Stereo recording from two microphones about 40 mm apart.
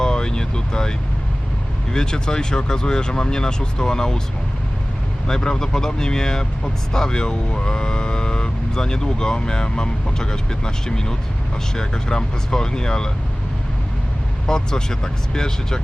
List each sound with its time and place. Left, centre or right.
0.0 s vehicle: centre
1.9 s speech: centre
5.3 s speech: centre
14.4 s speech: centre